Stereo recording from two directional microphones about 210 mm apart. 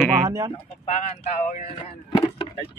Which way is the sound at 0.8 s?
30° left (ahead or behind).